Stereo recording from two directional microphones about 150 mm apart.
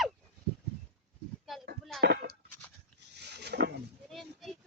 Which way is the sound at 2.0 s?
90° right.